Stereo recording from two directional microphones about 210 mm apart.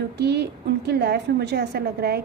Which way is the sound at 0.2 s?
55° right (ahead or behind).